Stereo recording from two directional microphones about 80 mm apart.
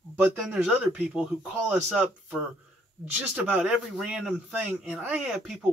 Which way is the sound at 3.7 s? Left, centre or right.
Centre.